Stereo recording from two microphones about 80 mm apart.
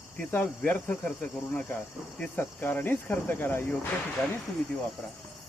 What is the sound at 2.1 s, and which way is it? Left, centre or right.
Speech, centre.